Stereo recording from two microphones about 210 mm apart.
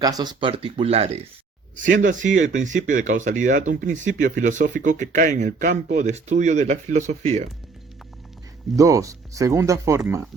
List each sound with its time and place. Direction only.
0.0 s speech: 20° right (ahead or behind)
8.7 s speech: 15° right (ahead or behind)